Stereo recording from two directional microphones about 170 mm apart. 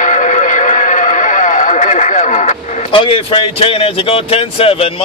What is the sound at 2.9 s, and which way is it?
Speech, 30° left (ahead or behind).